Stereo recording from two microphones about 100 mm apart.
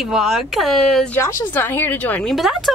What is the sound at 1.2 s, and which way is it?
Speech, 30° left (ahead or behind).